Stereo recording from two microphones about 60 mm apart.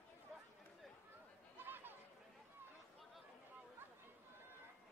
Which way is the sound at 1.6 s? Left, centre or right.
Right.